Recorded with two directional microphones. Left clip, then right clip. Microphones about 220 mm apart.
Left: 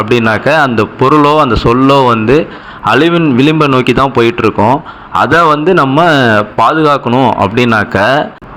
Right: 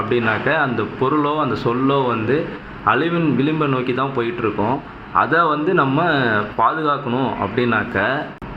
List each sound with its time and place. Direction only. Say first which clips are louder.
0.1 s speech: left 9 dB; 40° left (ahead or behind)